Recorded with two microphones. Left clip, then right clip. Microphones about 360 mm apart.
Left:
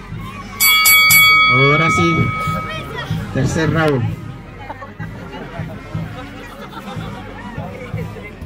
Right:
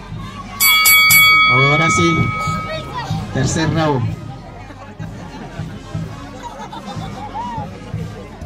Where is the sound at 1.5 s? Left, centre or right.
Right.